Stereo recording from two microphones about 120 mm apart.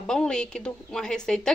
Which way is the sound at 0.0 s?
5° left (ahead or behind).